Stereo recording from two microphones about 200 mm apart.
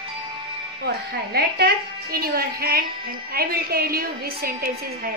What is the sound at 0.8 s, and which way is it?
Speech, 55° right (ahead or behind).